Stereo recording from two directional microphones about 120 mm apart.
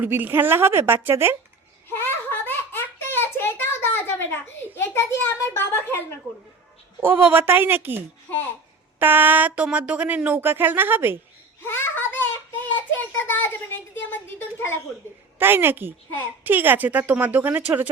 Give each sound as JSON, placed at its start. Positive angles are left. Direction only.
{"t": 0.0, "sound": "a woman's voice", "side_deg": -15}
{"t": 1.9, "sound": "a sound", "side_deg": 20}
{"t": 7.0, "sound": "speech", "side_deg": -15}
{"t": 11.6, "sound": "child singing", "side_deg": 20}
{"t": 13.1, "sound": "a sound", "side_deg": 15}
{"t": 14.1, "sound": "speech", "side_deg": 20}
{"t": 15.4, "sound": "speech", "side_deg": -20}